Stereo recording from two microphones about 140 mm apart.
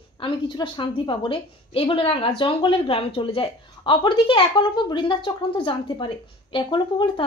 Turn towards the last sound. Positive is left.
turn(degrees=35)  # may be behind; listen again after turning